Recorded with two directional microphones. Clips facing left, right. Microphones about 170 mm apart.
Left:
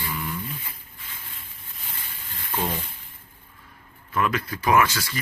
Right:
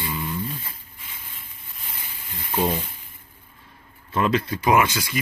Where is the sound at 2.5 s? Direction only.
15° right (ahead or behind).